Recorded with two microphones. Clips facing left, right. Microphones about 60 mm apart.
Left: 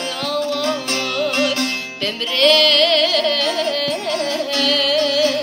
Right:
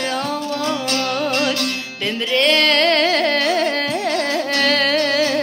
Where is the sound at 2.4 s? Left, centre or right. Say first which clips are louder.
Left 2 dB; right.